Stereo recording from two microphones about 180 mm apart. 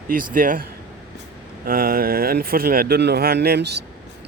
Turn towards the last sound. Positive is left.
turn(degrees=-65)  # may be behind; listen again after turning